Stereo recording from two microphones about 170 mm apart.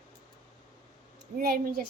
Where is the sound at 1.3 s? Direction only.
60° right (ahead or behind).